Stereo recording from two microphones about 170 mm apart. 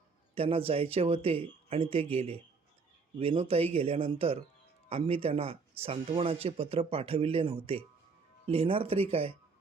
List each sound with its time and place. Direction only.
0.3 s speech: 35° right (ahead or behind)